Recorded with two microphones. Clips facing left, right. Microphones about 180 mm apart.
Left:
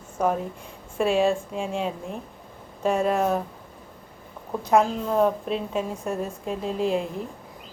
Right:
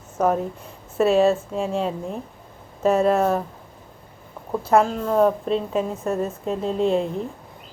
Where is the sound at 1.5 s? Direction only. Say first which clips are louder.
Right 4 dB; 40° right (ahead or behind).